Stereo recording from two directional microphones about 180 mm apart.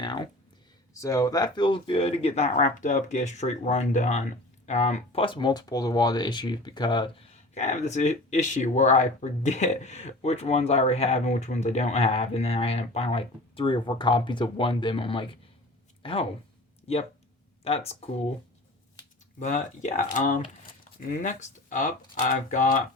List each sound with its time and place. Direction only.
0.0 s speech: 25° left (ahead or behind)
19.4 s speech: 45° left (ahead or behind)